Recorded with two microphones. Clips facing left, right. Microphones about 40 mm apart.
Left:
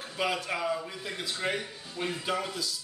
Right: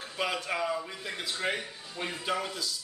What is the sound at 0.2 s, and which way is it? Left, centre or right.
A man's voice, centre.